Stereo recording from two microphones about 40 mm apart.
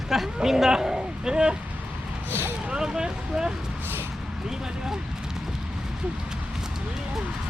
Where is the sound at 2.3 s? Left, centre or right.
Right.